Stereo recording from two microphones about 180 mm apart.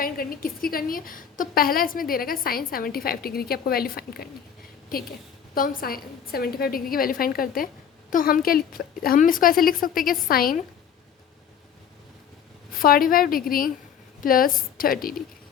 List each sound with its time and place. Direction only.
0.0 s a woman's voice: 55° left (ahead or behind)
5.5 s a woman's voice: 50° left (ahead or behind)
12.8 s a woman's voice: 55° left (ahead or behind)